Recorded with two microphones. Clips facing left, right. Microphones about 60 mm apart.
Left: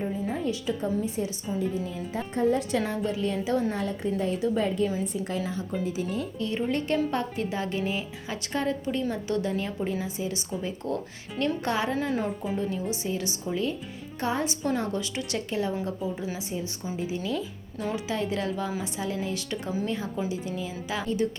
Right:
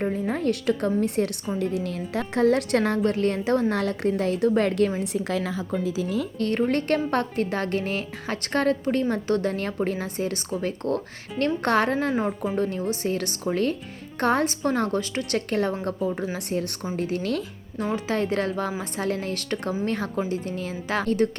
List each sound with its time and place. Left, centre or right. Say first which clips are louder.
0.0 s a woman's voice: right 4 dB; right
3.7 s a woman's voice: right 5 dB; right
6.4 s a woman's voice: right 5 dB; right
17.0 s a woman's voice: right 4 dB; right
17.9 s a woman's voice: right 5 dB; right